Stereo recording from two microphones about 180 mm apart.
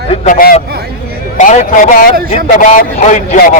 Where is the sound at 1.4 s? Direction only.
45° left (ahead or behind).